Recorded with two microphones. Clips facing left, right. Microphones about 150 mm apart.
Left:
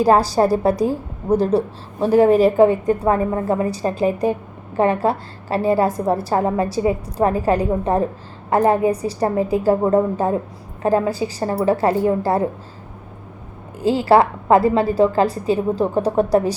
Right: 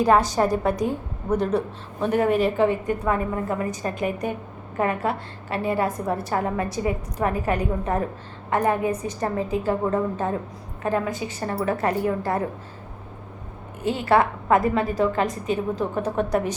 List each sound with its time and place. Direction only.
0.0 s a woman's voice: 35° left (ahead or behind)
13.8 s a woman's voice: 30° left (ahead or behind)